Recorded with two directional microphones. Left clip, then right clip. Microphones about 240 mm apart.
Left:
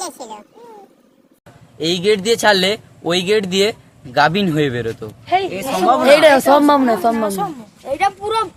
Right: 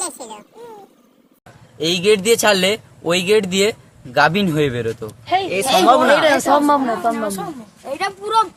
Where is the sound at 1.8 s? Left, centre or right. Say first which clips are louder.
Right 1 dB; centre.